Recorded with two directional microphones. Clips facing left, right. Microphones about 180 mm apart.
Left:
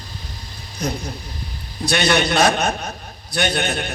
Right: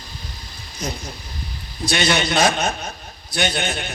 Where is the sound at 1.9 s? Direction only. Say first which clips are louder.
Left 2 dB; 60° left (ahead or behind).